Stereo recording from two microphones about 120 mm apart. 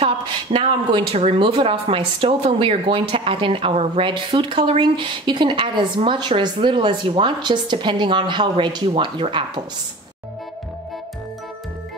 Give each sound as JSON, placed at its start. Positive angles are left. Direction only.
{"t": 0.0, "sound": "speech", "side_deg": -50}